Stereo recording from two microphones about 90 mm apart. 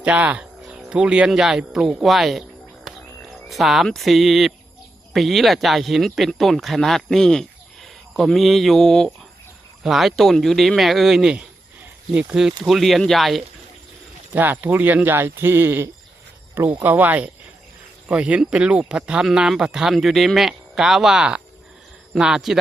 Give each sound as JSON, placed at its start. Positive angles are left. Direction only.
{"t": 0.0, "sound": "speech", "side_deg": -15}
{"t": 2.9, "sound": "frog", "side_deg": 0}
{"t": 3.5, "sound": "speech", "side_deg": 0}
{"t": 14.3, "sound": "speech", "side_deg": -20}